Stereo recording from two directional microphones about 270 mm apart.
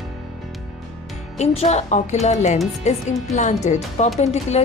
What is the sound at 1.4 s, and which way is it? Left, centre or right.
Speech, left.